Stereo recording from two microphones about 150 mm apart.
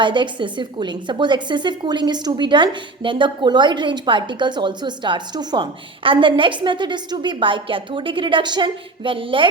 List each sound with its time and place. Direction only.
0.0 s a woman's voice: 30° right (ahead or behind)